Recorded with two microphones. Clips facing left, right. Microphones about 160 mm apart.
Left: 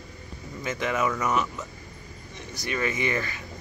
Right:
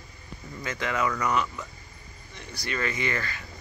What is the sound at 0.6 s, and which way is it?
Speech, 20° left (ahead or behind).